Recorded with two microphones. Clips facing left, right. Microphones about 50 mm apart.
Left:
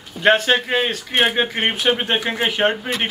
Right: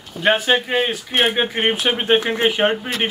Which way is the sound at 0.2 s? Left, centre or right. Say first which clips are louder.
Left 1 dB; centre.